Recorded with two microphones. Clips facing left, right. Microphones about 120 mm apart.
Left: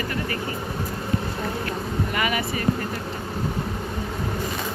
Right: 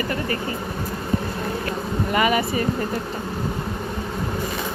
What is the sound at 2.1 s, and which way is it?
Speech, 30° right (ahead or behind).